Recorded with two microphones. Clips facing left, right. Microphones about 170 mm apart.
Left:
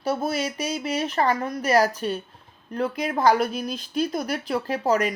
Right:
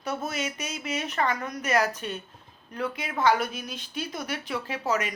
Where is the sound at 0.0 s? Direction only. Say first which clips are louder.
Left 6 dB; 35° left (ahead or behind).